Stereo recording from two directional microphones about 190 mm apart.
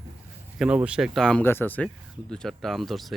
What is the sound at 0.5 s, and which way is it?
Speech, 5° right (ahead or behind).